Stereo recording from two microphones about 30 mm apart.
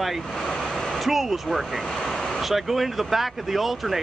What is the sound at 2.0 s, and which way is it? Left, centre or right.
Vehicle, centre.